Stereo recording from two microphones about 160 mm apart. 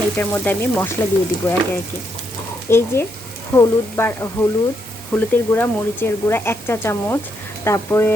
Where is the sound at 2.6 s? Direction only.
15° left (ahead or behind).